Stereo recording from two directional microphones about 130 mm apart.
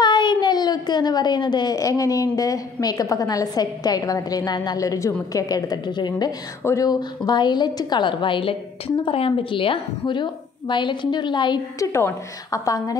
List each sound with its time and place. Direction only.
0.0 s a child's voice: 35° left (ahead or behind)
11.8 s a child's voice: 20° left (ahead or behind)